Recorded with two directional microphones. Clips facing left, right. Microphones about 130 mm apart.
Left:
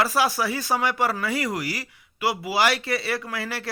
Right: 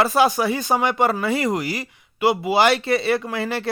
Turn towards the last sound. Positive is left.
turn(degrees=-25)  # may be behind; listen again after turning